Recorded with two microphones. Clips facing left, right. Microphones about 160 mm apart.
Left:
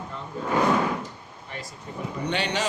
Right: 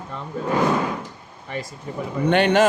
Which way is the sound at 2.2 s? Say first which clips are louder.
Right 11 dB; 55° right (ahead or behind).